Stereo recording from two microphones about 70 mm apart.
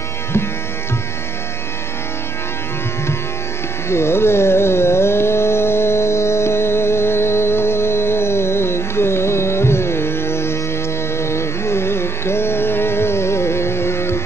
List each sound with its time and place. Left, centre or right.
3.9 s carnatic music: left
11.1 s music: left